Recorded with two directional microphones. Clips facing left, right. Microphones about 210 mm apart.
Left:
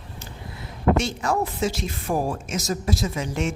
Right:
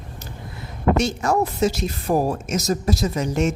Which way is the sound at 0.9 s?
40° right (ahead or behind).